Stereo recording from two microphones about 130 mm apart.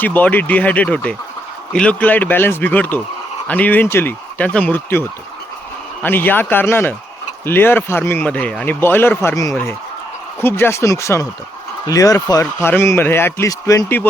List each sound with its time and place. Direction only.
0.0 s a man's voice: 15° left (ahead or behind)